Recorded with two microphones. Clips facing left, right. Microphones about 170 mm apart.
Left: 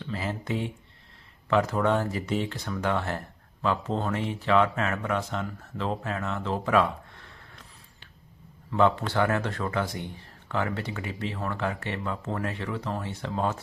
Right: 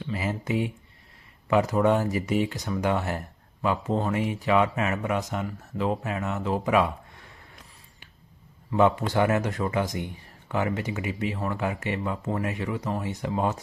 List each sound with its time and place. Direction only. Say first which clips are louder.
0.0 s a sound: right 2 dB; 10° right (ahead or behind)
1.5 s speech: right 2 dB; 15° right (ahead or behind)
8.7 s speech: right 2 dB; 15° right (ahead or behind)